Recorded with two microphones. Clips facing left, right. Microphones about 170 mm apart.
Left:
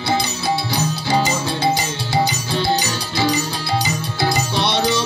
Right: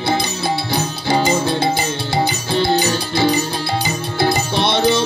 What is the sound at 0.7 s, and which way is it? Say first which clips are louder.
Music: right 3 dB; 55° right (ahead or behind).